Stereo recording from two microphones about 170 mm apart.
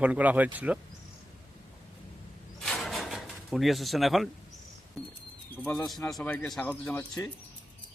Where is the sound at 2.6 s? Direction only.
Centre (ahead or behind).